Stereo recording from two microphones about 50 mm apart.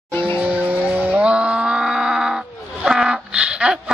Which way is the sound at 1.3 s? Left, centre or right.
Right.